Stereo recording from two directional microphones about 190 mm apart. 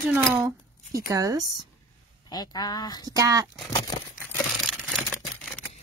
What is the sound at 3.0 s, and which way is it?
Speech, 20° right (ahead or behind).